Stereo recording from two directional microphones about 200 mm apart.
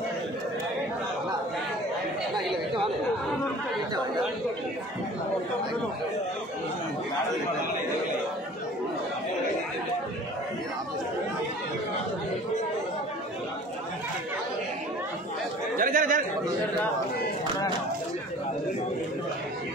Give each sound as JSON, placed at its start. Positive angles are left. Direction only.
{"t": 15.8, "sound": "speech", "side_deg": -40}